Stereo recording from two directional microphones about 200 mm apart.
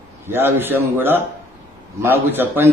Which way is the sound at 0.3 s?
10° right (ahead or behind).